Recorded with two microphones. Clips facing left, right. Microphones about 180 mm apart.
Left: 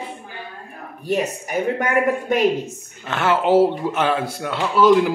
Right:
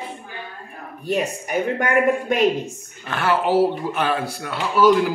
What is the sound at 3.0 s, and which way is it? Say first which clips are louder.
A man's voice: left 2 dB; 20° left (ahead or behind).